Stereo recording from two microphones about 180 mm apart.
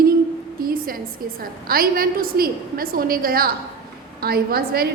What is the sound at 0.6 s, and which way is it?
A woman's voice, 55° right (ahead or behind).